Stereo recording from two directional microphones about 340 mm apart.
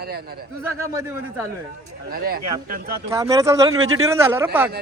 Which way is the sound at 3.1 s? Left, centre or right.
Centre.